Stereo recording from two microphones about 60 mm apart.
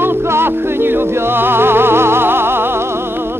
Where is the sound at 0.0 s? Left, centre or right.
Right.